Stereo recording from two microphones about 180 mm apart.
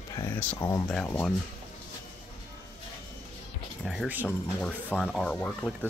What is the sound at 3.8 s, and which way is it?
Speech, centre (ahead or behind).